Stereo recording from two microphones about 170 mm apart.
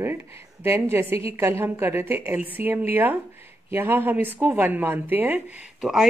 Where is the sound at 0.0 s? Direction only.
15° right (ahead or behind).